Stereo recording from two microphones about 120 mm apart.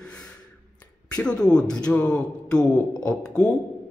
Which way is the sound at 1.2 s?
5° left (ahead or behind).